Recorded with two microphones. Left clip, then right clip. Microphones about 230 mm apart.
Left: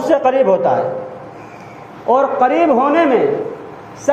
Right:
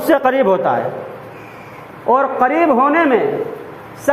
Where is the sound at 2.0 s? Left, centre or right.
Right.